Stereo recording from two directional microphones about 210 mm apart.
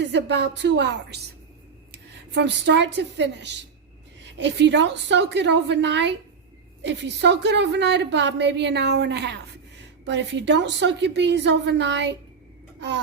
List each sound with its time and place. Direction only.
0.0 s a woman's voice: 55° right (ahead or behind)